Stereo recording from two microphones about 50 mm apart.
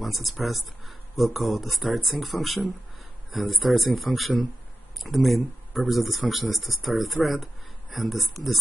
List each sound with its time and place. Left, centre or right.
0.0 s speech: centre
7.2 s speech: right
7.9 s speech: centre